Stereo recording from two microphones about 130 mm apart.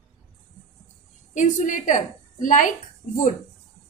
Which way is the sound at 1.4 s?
75° left (ahead or behind).